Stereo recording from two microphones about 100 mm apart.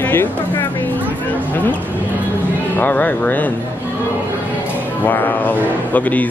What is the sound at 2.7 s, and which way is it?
Speech, 15° left (ahead or behind).